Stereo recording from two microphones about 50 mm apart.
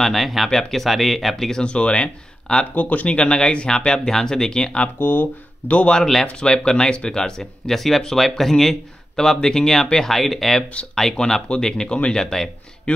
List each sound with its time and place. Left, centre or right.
0.0 s speech: centre
1.6 s speech: left
2.7 s speech: left; by 4.8 s centre
5.0 s speech: left
5.7 s a man's voice: left